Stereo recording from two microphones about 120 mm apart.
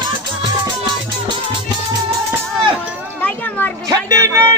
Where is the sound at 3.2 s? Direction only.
10° left (ahead or behind).